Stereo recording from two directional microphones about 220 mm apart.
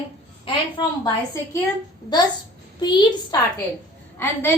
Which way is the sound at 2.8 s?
20° left (ahead or behind).